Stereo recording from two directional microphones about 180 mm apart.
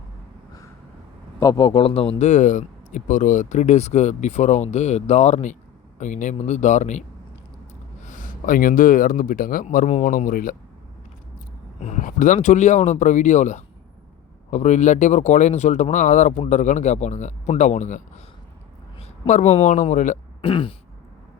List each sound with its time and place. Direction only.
1.4 s speech: 20° left (ahead or behind); by 7.0 s 40° left (ahead or behind)
8.0 s speech: 45° left (ahead or behind)
11.8 s speech: 40° left (ahead or behind)
19.3 s speech: 40° left (ahead or behind)
20.4 s throat clearing: 30° left (ahead or behind)